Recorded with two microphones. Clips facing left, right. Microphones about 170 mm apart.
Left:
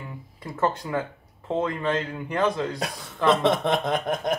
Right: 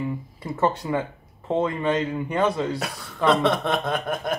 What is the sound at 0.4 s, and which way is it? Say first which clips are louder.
Speech: right 2 dB; 5° right (ahead or behind).